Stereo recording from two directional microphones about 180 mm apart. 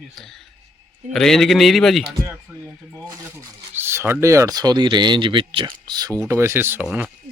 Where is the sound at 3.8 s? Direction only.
15° right (ahead or behind).